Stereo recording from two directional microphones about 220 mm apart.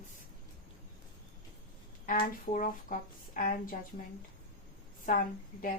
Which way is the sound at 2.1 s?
40° left (ahead or behind).